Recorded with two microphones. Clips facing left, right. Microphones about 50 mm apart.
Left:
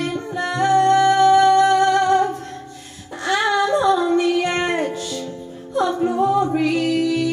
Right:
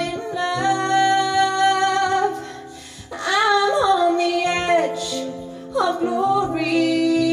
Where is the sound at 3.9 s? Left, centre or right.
Right.